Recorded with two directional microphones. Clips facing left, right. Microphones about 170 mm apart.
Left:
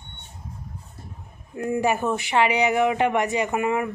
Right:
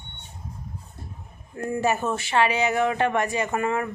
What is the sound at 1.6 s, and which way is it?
A woman's voice, 15° left (ahead or behind).